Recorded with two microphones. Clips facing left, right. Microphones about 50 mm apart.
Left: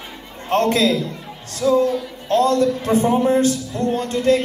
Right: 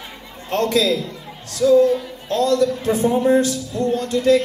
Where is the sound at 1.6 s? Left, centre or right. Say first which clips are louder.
Right 3 dB; centre.